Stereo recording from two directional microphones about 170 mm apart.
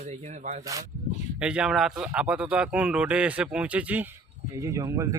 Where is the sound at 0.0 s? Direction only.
40° right (ahead or behind).